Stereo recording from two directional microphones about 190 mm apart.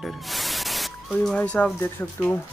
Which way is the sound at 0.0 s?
Centre (ahead or behind).